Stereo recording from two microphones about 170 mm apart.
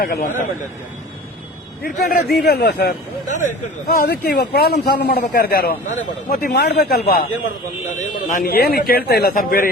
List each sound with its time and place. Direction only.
0.0 s a man's voice: 55° left (ahead or behind)
1.8 s a man's voice: 65° left (ahead or behind)
2.4 s a man's voice: 75° left (ahead or behind)
3.2 s a man's voice: 45° left (ahead or behind)
6.5 s a man's voice: 70° left (ahead or behind)
8.3 s a man's voice: 60° left (ahead or behind)